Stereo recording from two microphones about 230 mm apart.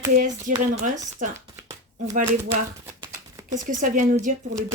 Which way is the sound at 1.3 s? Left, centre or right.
Centre.